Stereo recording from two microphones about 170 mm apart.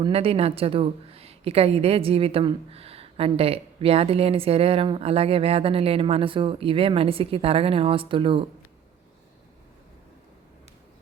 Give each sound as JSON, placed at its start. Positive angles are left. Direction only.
{"t": 0.0, "sound": "a woman's voice", "side_deg": -35}